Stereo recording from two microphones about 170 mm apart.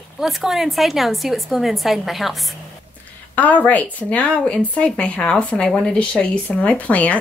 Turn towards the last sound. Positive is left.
turn(degrees=10)  # may be behind; listen again after turning